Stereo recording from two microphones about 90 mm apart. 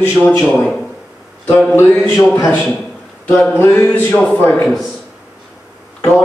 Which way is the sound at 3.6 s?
25° left (ahead or behind).